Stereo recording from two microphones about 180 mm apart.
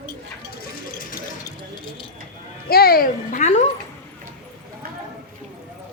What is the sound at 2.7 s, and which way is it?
Speech, 55° left (ahead or behind).